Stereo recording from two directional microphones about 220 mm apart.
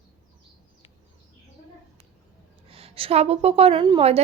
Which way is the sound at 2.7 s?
25° right (ahead or behind).